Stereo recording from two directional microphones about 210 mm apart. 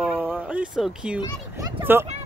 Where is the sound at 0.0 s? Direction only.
5° right (ahead or behind).